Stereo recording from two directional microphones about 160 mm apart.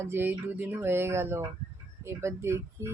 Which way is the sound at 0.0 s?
15° right (ahead or behind).